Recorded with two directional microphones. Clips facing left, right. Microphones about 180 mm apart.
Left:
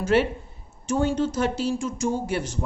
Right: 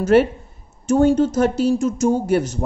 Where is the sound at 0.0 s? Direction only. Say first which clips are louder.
Right 7 dB; 45° right (ahead or behind).